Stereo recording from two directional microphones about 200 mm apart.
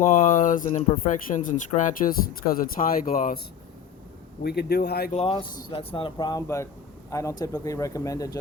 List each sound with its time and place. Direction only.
0.0 s speech: 40° left (ahead or behind)
4.4 s speech: 55° left (ahead or behind)
5.1 s speech: 30° left (ahead or behind)